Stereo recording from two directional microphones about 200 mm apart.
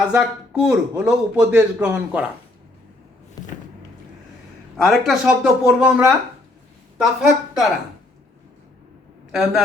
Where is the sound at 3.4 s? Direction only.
20° left (ahead or behind).